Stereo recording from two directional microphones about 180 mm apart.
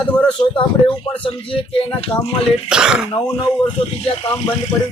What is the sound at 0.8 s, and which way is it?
Speech, 25° left (ahead or behind).